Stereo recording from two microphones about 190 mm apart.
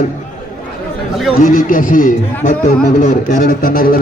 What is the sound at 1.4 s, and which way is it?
Speech, 45° left (ahead or behind).